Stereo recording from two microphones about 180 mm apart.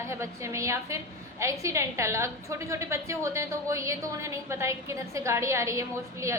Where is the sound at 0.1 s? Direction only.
15° right (ahead or behind).